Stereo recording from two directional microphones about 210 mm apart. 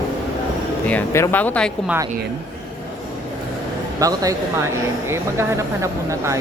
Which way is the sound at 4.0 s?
15° right (ahead or behind).